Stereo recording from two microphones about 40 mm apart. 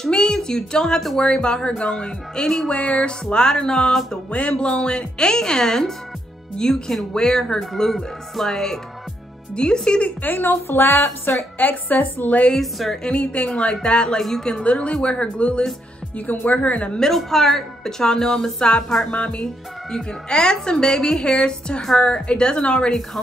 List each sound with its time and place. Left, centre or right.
0.1 s a woman's voice: centre
2.7 s a woman's voice: left; by 4.0 s centre
4.3 s a woman's voice: left; by 8.7 s centre
9.6 s a woman's voice: left
10.2 s a woman's voice: left
12.5 s a woman's voice: centre
13.0 s a woman's voice: left
17.0 s speech: centre
19.1 s a woman's voice: left
19.9 s a woman's voice: centre